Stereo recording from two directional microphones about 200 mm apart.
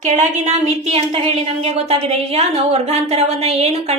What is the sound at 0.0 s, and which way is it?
A woman's voice, 35° right (ahead or behind).